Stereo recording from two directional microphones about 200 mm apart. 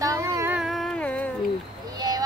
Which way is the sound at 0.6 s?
Centre (ahead or behind).